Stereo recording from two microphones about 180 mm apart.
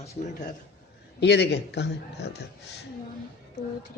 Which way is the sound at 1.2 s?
70° left (ahead or behind).